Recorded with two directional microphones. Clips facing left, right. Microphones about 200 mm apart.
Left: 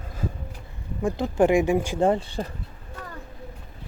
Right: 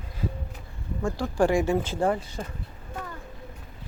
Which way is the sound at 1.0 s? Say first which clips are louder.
Left 3 dB; 20° left (ahead or behind).